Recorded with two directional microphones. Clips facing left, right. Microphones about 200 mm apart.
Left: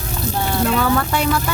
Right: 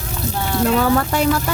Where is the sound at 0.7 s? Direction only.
35° right (ahead or behind).